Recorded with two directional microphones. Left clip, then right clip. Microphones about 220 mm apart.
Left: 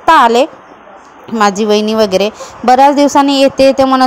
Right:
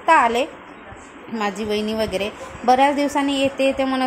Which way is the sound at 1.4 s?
35° left (ahead or behind).